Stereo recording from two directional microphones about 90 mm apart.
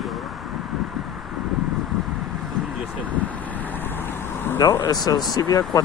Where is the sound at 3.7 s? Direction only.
20° left (ahead or behind).